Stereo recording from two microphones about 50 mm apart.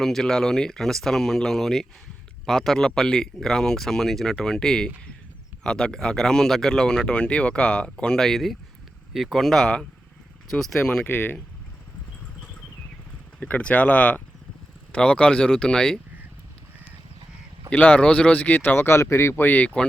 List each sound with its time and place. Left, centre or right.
0.0 s speech: centre
11.0 s speech: left
13.4 s speech: left
17.7 s speech: left
18.7 s speech: left
19.4 s speech: left